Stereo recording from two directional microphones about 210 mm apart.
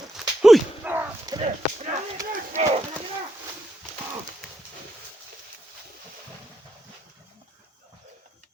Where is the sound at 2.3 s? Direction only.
40° right (ahead or behind).